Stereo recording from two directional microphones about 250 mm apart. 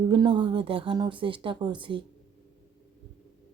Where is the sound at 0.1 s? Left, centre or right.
Centre.